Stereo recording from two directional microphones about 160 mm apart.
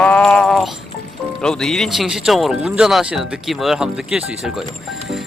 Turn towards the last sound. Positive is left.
turn(degrees=-5)  # may be behind; listen again after turning